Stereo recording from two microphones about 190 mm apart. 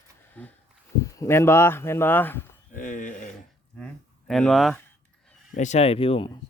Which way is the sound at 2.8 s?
45° left (ahead or behind).